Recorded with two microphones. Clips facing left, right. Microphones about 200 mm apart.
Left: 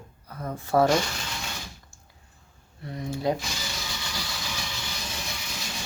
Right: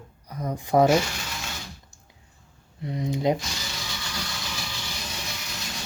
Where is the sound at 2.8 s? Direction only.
20° right (ahead or behind).